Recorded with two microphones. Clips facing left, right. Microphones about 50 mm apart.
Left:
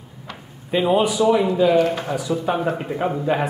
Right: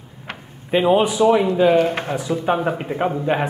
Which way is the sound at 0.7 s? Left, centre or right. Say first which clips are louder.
Right 2 dB; right.